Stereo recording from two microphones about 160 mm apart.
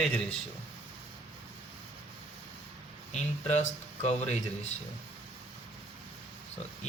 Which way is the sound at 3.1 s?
45° left (ahead or behind).